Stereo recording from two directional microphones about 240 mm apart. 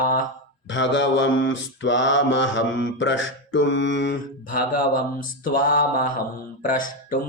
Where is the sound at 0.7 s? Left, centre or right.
Left.